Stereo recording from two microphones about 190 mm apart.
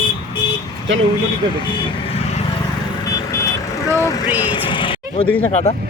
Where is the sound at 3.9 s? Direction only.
15° left (ahead or behind).